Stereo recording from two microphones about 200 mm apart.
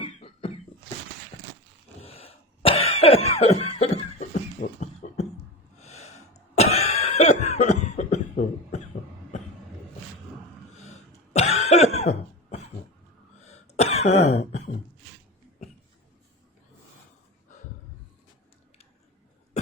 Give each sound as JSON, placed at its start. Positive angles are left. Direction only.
{"t": 0.0, "sound": "cough", "side_deg": 30}
{"t": 2.0, "sound": "cough", "side_deg": 30}
{"t": 11.3, "sound": "cough", "side_deg": 30}